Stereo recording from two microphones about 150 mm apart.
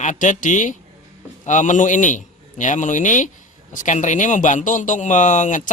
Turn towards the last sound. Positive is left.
turn(degrees=55)  # may be behind; listen again after turning